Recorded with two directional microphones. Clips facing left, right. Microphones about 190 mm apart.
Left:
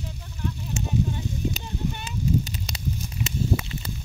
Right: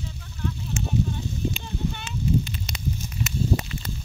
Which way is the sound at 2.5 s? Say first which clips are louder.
Right 1 dB; 35° left (ahead or behind).